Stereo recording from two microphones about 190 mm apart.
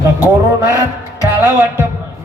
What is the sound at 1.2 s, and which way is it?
Music, 15° right (ahead or behind).